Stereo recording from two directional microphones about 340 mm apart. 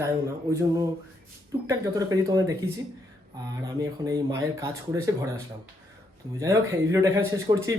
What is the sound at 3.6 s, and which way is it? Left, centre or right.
Speech, centre.